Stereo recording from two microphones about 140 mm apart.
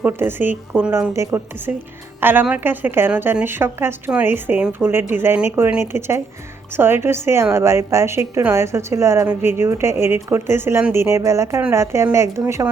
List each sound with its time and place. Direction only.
0.0 s a woman's voice: 15° right (ahead or behind)